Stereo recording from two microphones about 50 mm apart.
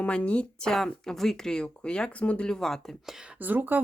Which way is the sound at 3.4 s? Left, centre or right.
Right.